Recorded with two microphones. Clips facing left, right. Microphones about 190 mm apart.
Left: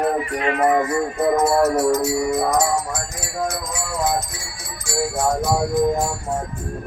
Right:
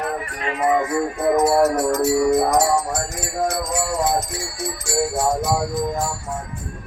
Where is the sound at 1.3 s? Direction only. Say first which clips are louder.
Right 2 dB; 15° right (ahead or behind).